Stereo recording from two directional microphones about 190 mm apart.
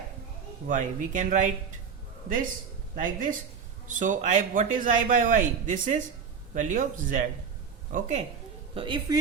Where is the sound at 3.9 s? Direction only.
40° right (ahead or behind).